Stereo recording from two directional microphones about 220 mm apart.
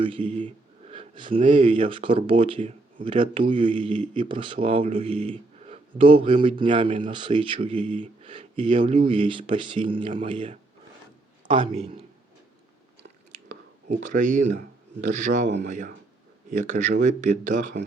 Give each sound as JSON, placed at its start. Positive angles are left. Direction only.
{"t": 0.0, "sound": "speech", "side_deg": -25}
{"t": 13.5, "sound": "speech", "side_deg": -35}
{"t": 15.6, "sound": "speech", "side_deg": -35}